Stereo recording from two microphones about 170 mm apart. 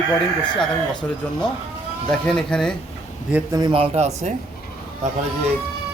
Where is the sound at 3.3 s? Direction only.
20° right (ahead or behind); by 4.3 s 40° right (ahead or behind).